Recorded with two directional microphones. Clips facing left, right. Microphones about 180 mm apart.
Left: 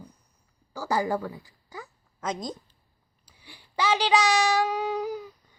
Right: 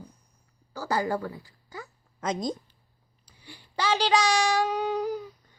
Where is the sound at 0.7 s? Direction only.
15° left (ahead or behind).